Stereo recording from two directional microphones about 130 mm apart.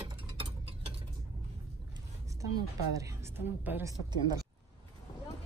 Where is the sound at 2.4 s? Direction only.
25° right (ahead or behind).